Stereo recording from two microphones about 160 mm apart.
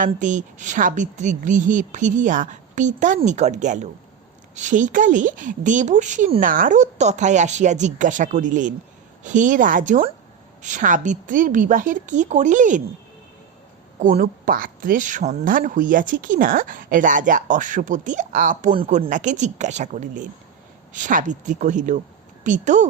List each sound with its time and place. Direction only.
0.0 s a woman's voice: 50° right (ahead or behind)
14.0 s a woman's voice: 55° right (ahead or behind)